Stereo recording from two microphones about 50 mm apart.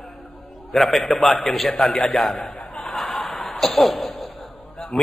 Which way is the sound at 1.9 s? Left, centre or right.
Centre.